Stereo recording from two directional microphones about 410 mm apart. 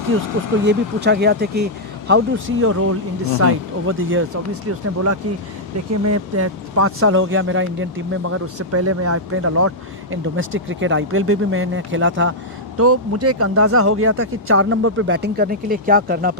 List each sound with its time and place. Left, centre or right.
0.6 s speech: right
5.9 s speech: right